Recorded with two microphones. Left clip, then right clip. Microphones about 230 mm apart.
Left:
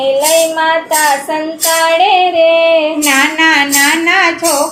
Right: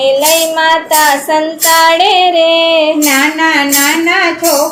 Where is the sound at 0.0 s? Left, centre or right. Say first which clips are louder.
Right 1 dB; right.